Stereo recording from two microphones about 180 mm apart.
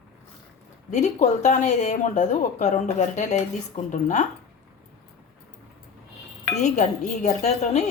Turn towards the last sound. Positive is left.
turn(degrees=40)  # may be behind; listen again after turning